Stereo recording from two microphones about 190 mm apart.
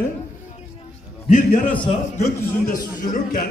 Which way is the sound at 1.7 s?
25° left (ahead or behind).